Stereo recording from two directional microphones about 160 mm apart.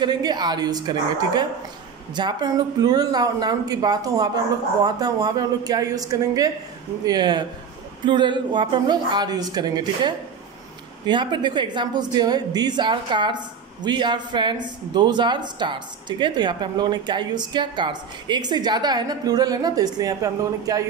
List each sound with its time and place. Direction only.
0.0 s speech: 25° right (ahead or behind)